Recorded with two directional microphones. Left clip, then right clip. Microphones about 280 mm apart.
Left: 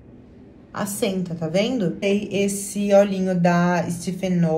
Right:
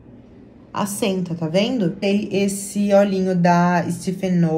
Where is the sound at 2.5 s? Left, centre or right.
Centre.